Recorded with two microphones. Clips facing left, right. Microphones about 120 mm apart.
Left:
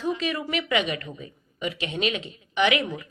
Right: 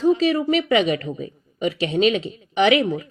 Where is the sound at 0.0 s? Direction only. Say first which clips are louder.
Right 10 dB; 35° right (ahead or behind).